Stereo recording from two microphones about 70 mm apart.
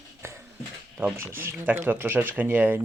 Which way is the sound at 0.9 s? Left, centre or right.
Right.